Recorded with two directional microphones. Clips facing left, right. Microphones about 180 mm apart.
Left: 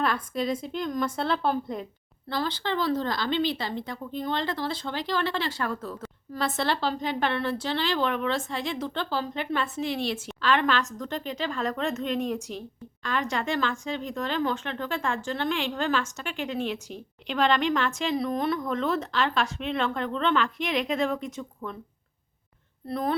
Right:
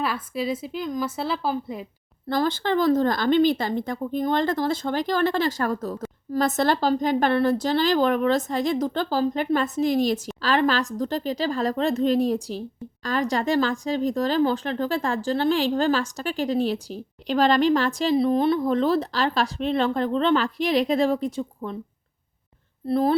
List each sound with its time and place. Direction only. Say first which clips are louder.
0.0 s speech: right 1 dB; 5° right (ahead or behind)
2.3 s speech: right 6 dB; 45° right (ahead or behind); by 21.8 s 30° right (ahead or behind)
22.9 s speech: right 7 dB; 30° right (ahead or behind)